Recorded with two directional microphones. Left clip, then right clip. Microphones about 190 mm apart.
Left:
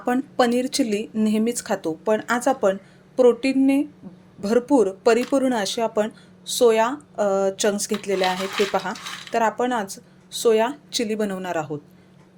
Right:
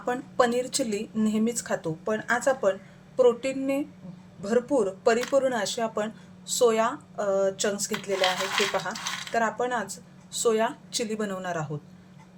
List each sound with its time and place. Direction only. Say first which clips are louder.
0.0 s speech: left 4 dB; 40° left (ahead or behind)
9.3 s speech: left 6 dB; 40° left (ahead or behind)